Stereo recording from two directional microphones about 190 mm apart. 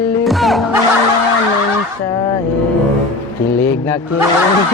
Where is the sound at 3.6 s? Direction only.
10° left (ahead or behind).